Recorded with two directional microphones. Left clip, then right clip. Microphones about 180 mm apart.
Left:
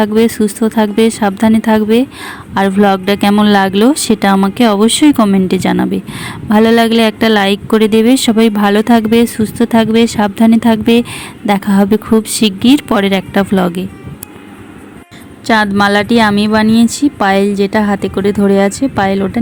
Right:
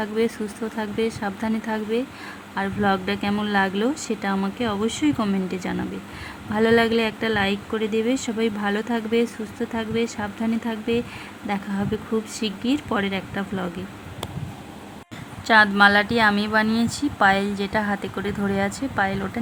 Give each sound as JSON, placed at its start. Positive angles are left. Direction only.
{"t": 0.0, "sound": "a woman's voice", "side_deg": 40}
{"t": 15.4, "sound": "a woman's voice", "side_deg": 30}